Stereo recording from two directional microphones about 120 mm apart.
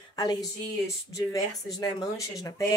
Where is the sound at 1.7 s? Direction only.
30° left (ahead or behind).